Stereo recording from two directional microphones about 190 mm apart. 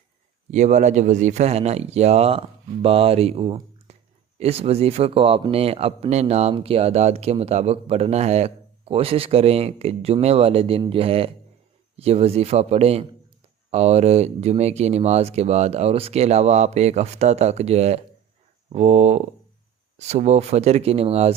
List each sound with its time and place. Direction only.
0.5 s a man's voice: 40° right (ahead or behind)